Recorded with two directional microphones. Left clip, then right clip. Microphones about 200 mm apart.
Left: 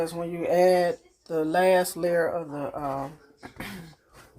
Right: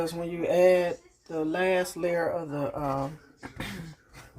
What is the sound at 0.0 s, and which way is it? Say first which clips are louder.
Speech: left 1 dB; 10° left (ahead or behind).